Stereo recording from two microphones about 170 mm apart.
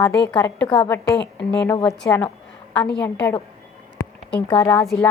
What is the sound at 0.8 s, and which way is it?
Speech, 20° left (ahead or behind).